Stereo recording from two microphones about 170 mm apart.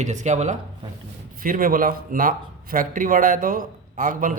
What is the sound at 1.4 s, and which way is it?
Speech, 55° right (ahead or behind).